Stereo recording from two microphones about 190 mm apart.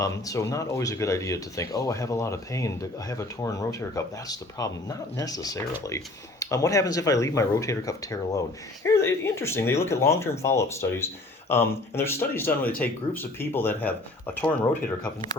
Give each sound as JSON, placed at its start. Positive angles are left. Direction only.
{"t": 0.0, "sound": "speech", "side_deg": 15}